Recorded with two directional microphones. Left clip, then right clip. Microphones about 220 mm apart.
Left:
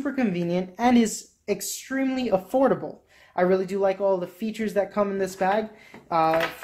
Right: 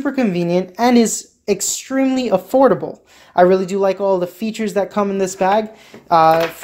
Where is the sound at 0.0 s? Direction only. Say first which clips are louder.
Right 8 dB; 30° right (ahead or behind).